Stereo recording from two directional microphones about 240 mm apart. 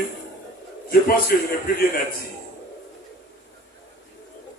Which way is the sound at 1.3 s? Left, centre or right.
Left.